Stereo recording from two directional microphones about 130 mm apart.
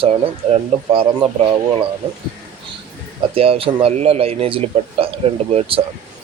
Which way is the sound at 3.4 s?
45° right (ahead or behind).